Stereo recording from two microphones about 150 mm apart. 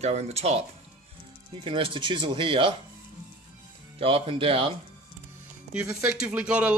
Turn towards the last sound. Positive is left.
turn(degrees=-5)  # may be behind; listen again after turning